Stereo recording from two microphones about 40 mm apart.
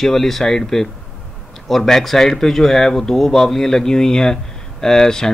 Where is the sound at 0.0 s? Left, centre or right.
Centre.